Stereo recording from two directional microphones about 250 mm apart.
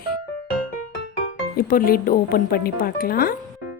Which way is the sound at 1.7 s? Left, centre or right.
Left.